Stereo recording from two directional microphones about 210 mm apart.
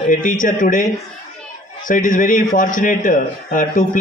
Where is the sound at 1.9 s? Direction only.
40° left (ahead or behind).